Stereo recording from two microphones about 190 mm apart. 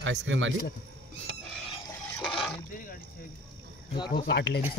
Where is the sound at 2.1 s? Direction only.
5° left (ahead or behind).